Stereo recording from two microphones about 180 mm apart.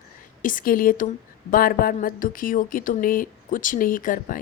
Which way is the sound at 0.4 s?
50° left (ahead or behind).